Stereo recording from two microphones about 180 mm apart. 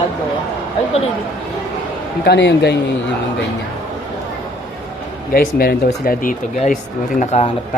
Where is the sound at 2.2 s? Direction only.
70° left (ahead or behind).